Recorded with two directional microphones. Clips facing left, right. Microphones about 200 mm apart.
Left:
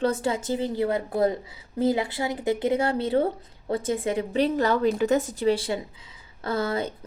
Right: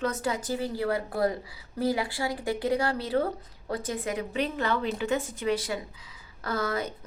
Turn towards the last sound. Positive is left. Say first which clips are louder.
# left 3 dB
turn(degrees=30)  # may be behind; listen again after turning